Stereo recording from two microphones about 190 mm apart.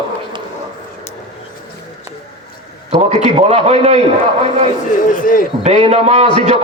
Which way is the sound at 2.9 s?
35° right (ahead or behind).